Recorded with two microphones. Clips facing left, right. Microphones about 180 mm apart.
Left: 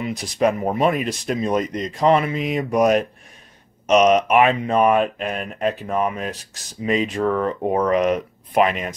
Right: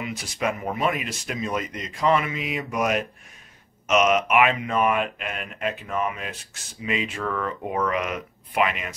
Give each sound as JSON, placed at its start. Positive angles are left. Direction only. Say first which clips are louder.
{"t": 0.0, "sound": "speech", "louder": "left 8 dB", "side_deg": 35}